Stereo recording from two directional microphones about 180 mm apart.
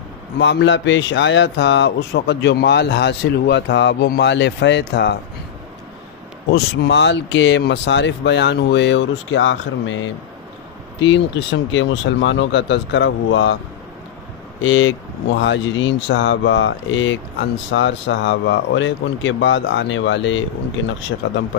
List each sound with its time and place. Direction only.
0.4 s a man's voice: 75° left (ahead or behind)
6.5 s speech: 80° left
14.6 s speech: 90° left